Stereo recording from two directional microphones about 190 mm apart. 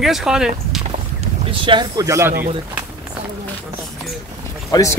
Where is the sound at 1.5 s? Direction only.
25° right (ahead or behind).